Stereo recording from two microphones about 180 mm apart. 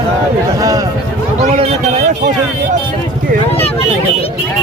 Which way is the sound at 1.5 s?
40° right (ahead or behind).